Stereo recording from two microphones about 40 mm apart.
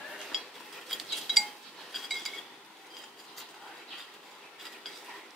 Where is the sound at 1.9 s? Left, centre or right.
Centre.